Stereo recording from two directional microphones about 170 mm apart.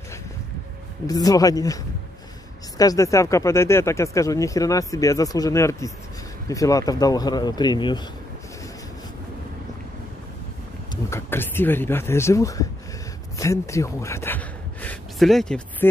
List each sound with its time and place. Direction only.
1.0 s speech: 20° left (ahead or behind)
2.8 s speech: 20° left (ahead or behind)
11.1 s speech: 15° left (ahead or behind)